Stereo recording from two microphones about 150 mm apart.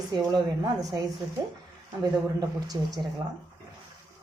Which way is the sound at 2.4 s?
25° right (ahead or behind).